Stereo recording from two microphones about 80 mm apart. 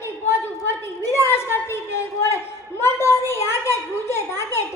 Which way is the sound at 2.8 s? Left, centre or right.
Left.